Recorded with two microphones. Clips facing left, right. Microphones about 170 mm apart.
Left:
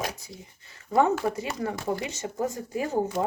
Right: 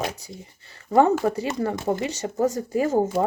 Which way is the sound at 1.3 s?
35° right (ahead or behind).